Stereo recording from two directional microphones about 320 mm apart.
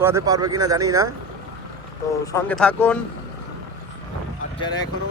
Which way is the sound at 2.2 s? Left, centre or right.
Centre.